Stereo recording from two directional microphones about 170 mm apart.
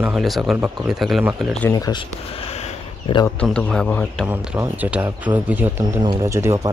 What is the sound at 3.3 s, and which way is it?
Speech, 5° left (ahead or behind).